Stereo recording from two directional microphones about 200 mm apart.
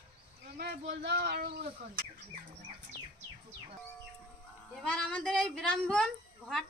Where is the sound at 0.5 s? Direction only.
55° right (ahead or behind).